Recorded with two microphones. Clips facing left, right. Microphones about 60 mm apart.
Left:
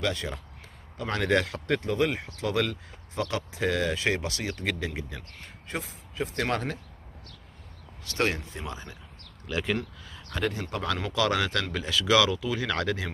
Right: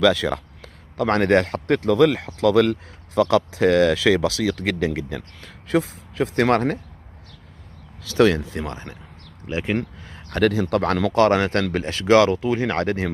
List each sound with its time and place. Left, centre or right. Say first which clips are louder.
0.0 s speech: right 12 dB; right
8.3 s speech: right 10 dB; right
8.6 s speech: right 6 dB; right
9.5 s speech: right 5 dB; right
9.8 s a sound: right 7 dB; right
10.3 s speech: right 11 dB; right
11.1 s speech: right 9 dB; right